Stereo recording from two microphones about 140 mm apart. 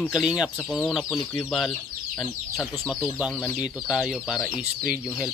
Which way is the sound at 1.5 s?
Centre (ahead or behind).